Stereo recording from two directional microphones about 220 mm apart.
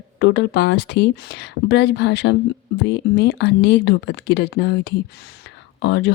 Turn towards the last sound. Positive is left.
turn(degrees=55)  # may be behind; listen again after turning